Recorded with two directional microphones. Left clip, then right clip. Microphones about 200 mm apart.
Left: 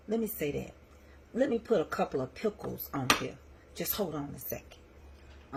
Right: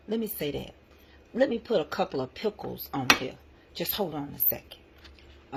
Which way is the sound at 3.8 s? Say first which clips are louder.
Right 4 dB; 25° right (ahead or behind).